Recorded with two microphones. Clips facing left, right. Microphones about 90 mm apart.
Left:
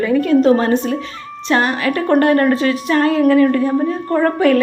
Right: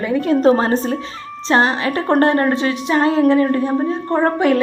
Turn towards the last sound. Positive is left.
turn(degrees=-20)  # may be behind; listen again after turning